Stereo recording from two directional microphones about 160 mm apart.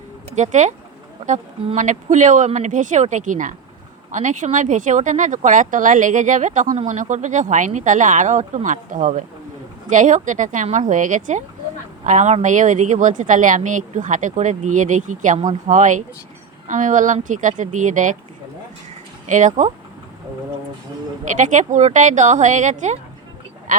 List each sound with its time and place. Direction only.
0.3 s a woman's voice: 50° right (ahead or behind)
19.3 s a woman's voice: 50° right (ahead or behind)
21.3 s a woman's voice: 50° right (ahead or behind)